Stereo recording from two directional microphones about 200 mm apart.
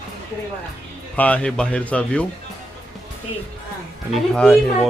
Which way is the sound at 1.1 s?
5° left (ahead or behind).